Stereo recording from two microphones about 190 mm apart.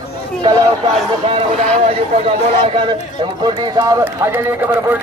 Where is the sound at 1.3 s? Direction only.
30° right (ahead or behind).